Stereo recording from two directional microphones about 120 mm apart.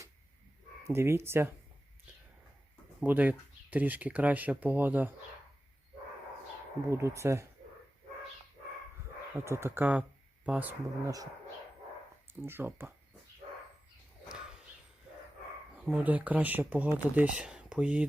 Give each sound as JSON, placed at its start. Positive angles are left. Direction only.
{"t": 0.9, "sound": "speech", "side_deg": -20}
{"t": 3.0, "sound": "speech", "side_deg": -15}
{"t": 6.9, "sound": "speech", "side_deg": -25}
{"t": 9.3, "sound": "speech", "side_deg": -20}
{"t": 11.0, "sound": "speech", "side_deg": -30}
{"t": 12.3, "sound": "speech", "side_deg": -20}
{"t": 15.9, "sound": "speech", "side_deg": -10}